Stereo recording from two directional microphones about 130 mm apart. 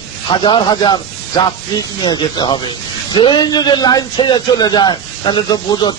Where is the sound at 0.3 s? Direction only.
35° left (ahead or behind).